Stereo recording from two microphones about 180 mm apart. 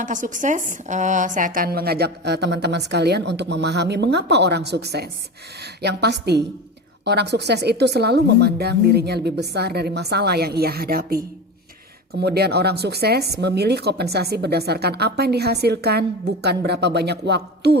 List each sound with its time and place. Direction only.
0.0 s a woman's voice: 45° right (ahead or behind); by 17.7 s 70° right (ahead or behind)